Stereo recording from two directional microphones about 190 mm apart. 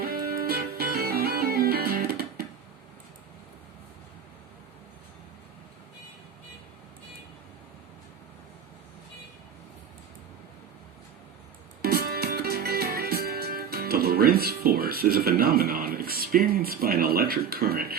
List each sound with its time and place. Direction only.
0.0 s music: 55° right (ahead or behind)
11.8 s music: 55° right (ahead or behind)